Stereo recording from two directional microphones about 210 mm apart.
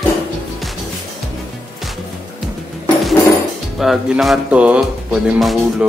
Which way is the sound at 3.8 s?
Centre (ahead or behind).